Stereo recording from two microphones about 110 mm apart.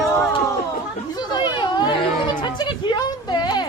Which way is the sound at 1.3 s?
40° left (ahead or behind).